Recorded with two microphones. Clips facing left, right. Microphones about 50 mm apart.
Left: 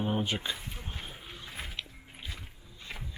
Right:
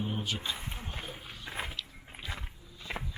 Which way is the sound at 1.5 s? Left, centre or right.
Right.